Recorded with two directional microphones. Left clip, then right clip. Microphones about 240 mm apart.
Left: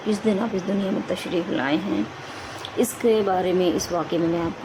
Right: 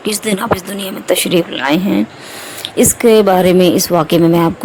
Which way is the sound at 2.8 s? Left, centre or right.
Right.